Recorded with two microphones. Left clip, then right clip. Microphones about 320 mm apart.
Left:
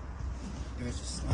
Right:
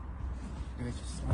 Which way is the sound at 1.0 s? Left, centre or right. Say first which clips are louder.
Left 4 dB; centre.